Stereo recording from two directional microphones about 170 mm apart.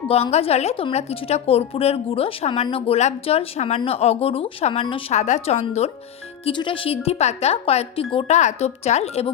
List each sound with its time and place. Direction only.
0.1 s a woman's voice: 35° left (ahead or behind)
6.4 s a woman's voice: 30° left (ahead or behind)